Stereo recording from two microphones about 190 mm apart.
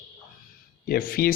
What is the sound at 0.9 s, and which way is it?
Speech, 50° left (ahead or behind).